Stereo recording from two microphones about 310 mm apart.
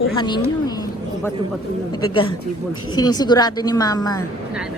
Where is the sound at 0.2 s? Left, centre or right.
Centre.